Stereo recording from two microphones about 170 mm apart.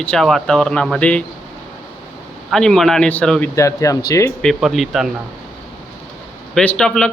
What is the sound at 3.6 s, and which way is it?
Speech, 20° left (ahead or behind).